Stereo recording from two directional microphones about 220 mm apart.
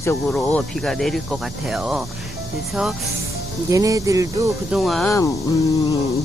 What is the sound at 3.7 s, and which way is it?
Speech, 15° right (ahead or behind).